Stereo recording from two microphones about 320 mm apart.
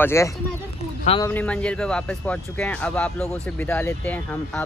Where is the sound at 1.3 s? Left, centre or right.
Centre.